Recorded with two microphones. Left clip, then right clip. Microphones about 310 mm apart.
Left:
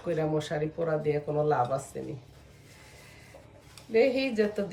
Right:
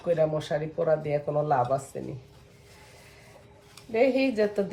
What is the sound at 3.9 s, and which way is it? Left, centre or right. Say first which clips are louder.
Speech: right 1 dB; centre.